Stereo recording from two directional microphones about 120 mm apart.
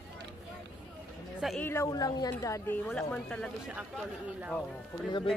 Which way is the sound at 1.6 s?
20° left (ahead or behind).